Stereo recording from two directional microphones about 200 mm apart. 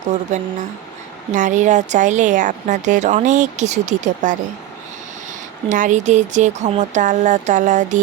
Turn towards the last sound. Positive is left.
turn(degrees=-40)  # may be behind; listen again after turning